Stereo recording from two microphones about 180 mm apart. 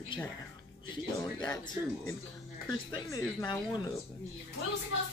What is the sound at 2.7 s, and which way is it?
Speech, 15° left (ahead or behind).